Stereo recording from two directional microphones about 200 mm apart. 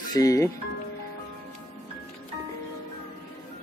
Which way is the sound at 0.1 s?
15° left (ahead or behind).